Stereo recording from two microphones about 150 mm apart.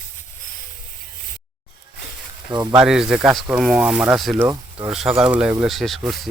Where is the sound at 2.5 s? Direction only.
30° right (ahead or behind).